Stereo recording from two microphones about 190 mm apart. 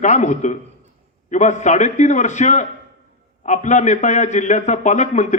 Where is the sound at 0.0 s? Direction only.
40° left (ahead or behind).